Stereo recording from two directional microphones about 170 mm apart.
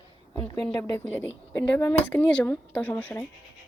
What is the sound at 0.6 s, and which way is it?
Speech, 10° left (ahead or behind).